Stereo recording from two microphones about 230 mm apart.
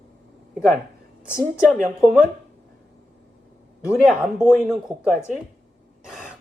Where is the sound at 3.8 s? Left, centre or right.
Centre.